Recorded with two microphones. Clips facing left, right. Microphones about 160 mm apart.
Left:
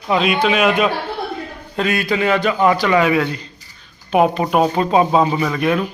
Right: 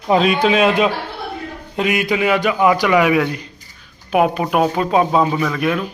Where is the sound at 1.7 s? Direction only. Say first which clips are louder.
Right 1 dB; 15° right (ahead or behind).